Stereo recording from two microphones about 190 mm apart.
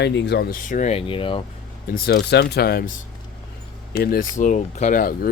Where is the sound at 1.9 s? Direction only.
60° left (ahead or behind).